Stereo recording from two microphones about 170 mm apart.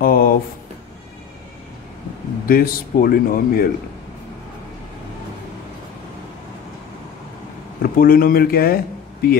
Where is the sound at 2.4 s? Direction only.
60° left (ahead or behind).